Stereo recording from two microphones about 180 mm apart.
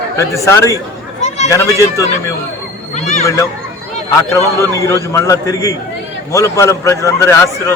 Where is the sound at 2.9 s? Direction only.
40° left (ahead or behind).